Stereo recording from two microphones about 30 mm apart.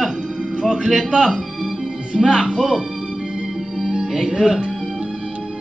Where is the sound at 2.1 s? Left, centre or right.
Centre.